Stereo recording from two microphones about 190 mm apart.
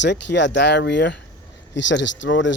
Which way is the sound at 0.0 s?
65° left (ahead or behind).